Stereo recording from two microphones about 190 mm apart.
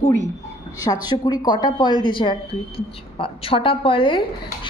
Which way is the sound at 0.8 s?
20° left (ahead or behind).